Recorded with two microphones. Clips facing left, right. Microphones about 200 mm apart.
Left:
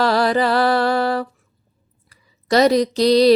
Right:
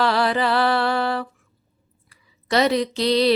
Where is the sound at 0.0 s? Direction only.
40° left (ahead or behind).